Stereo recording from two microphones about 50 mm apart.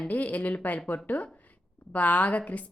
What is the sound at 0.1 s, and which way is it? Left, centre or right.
A woman's voice, left.